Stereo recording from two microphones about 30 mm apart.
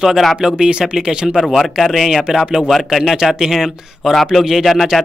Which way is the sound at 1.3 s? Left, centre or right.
Centre.